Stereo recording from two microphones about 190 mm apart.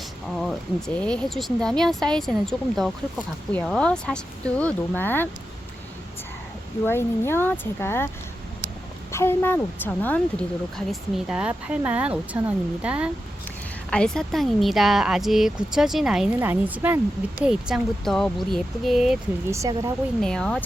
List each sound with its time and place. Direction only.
0.9 s speech: 5° left (ahead or behind)
6.8 s speech: 10° left (ahead or behind)
9.1 s speech: 10° left (ahead or behind)
11.3 s speech: 5° right (ahead or behind)
13.9 s speech: 5° left (ahead or behind)
19.5 s speech: 15° right (ahead or behind)
20.2 s speech: 5° left (ahead or behind)